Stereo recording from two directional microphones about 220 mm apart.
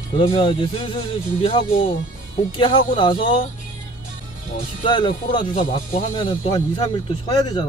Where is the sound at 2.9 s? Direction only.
20° left (ahead or behind).